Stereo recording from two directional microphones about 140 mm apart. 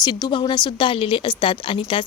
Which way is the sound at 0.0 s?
30° left (ahead or behind).